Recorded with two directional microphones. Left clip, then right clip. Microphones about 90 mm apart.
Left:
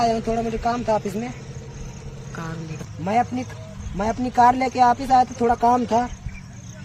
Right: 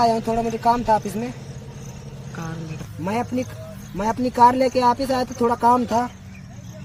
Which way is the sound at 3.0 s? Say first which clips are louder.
Left 3 dB; 35° left (ahead or behind).